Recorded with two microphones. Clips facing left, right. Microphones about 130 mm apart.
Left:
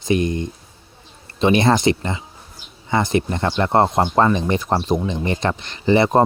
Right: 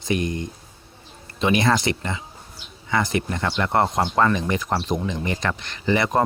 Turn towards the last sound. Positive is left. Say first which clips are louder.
# left 6 dB
turn(degrees=25)  # may be behind; listen again after turning